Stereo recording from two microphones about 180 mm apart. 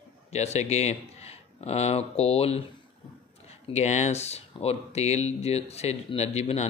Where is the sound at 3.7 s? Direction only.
40° left (ahead or behind).